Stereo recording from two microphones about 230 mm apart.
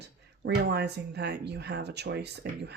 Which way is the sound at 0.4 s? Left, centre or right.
Right.